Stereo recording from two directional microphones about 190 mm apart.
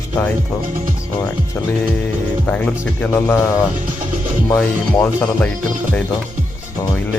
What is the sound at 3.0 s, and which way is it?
Speech, 10° left (ahead or behind).